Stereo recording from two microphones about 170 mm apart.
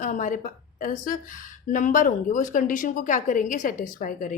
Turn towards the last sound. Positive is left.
turn(degrees=50)  # may be behind; listen again after turning